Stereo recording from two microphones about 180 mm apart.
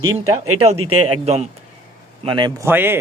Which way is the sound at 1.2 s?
35° right (ahead or behind).